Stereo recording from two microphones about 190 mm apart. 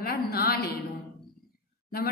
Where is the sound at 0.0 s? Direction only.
55° left (ahead or behind).